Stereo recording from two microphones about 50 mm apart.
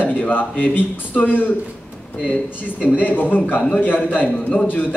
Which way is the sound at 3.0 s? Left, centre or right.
Left.